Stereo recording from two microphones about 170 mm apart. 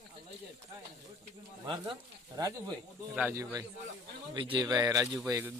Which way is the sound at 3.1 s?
10° right (ahead or behind).